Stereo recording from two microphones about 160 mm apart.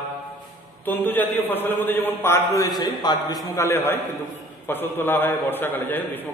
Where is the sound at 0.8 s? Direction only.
10° left (ahead or behind).